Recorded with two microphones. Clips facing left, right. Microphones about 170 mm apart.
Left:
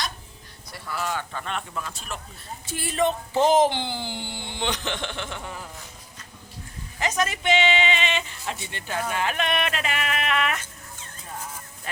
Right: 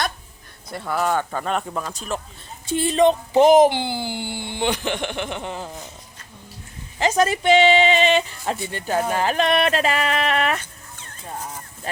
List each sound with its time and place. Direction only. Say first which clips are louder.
0.7 s a man's voice: right 8 dB; 55° right (ahead or behind); by 2.2 s 40° right (ahead or behind)
2.6 s speech: right 8 dB; 25° right (ahead or behind)
7.0 s speech: right 7 dB; 30° right (ahead or behind)